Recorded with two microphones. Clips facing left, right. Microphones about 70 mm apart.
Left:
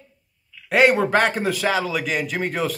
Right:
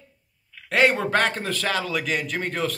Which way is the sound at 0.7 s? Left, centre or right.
Centre.